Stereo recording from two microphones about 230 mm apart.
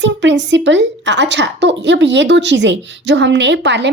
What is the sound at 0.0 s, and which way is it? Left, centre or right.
A woman's voice, right.